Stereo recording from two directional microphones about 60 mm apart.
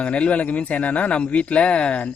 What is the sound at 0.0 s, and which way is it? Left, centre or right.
Speech, left.